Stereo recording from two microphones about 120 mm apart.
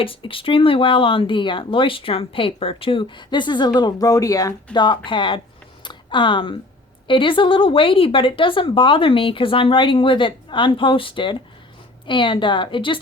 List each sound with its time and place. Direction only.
0.0 s speech: 50° left (ahead or behind)
5.8 s a sound: 40° left (ahead or behind)
7.1 s speech: 45° left (ahead or behind)